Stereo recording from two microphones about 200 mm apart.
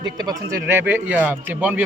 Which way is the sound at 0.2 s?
15° right (ahead or behind).